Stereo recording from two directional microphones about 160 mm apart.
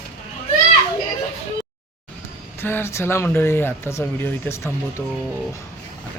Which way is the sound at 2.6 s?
15° left (ahead or behind).